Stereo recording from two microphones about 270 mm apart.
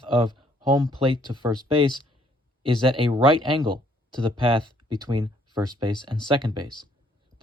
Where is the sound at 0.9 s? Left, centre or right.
Centre.